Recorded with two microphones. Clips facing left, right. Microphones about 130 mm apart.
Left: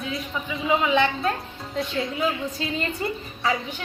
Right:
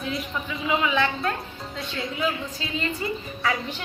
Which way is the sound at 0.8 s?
25° left (ahead or behind).